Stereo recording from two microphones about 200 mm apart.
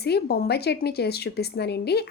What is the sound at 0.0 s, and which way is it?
A woman's voice, 55° left (ahead or behind).